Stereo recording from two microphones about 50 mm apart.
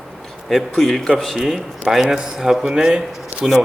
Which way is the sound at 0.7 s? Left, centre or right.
Centre.